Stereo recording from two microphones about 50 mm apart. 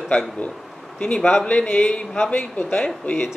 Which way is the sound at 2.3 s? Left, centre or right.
Left.